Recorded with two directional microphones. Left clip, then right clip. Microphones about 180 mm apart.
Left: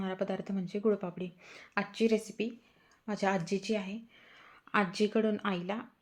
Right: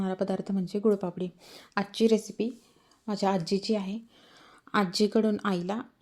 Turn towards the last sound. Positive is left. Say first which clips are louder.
# right 4 dB
turn(degrees=-40)  # may be behind; listen again after turning